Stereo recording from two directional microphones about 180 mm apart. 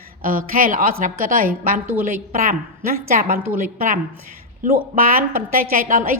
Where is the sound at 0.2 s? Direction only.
50° right (ahead or behind).